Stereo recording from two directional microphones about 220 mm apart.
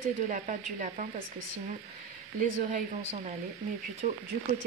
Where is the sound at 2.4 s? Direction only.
35° right (ahead or behind).